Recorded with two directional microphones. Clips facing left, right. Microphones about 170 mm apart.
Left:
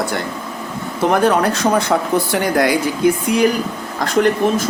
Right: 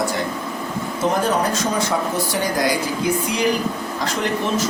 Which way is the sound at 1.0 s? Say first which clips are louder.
Left 5 dB; 65° left (ahead or behind).